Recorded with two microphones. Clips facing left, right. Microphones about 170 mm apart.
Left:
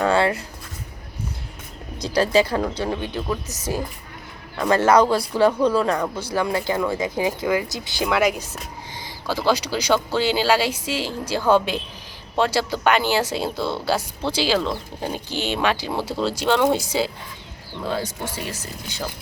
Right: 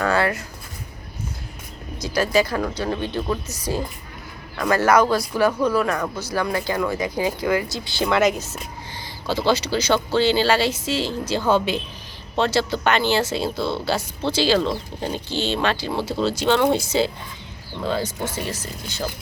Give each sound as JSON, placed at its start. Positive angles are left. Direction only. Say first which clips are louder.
{"t": 0.0, "sound": "speech", "louder": "left 2 dB", "side_deg": 25}
{"t": 2.0, "sound": "speech", "louder": "left 2 dB", "side_deg": 30}